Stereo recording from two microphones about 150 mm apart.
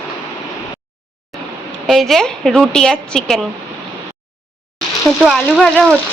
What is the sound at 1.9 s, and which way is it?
Speech, centre (ahead or behind).